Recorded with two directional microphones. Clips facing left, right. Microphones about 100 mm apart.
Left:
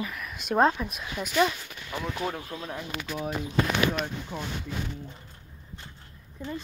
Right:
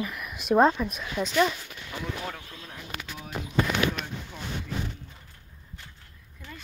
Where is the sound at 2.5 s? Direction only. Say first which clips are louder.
Left 8 dB; 35° left (ahead or behind).